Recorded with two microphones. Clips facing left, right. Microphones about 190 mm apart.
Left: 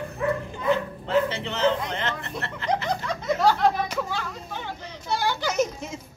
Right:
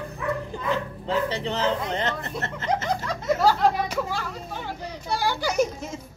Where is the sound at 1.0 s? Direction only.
35° right (ahead or behind).